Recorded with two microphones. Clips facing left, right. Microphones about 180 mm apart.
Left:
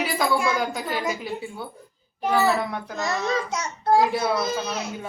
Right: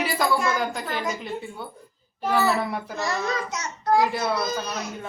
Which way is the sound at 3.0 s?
30° left (ahead or behind).